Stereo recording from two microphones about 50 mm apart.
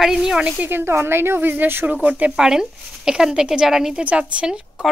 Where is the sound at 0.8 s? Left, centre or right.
Right.